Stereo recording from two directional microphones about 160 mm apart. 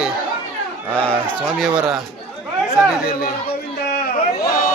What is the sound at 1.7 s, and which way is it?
Speech, 5° right (ahead or behind).